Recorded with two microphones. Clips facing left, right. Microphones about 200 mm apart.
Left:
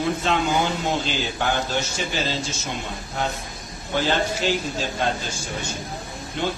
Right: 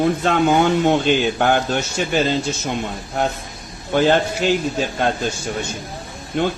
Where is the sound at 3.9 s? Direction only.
55° right (ahead or behind).